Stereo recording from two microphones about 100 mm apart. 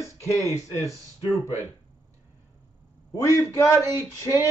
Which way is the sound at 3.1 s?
35° left (ahead or behind).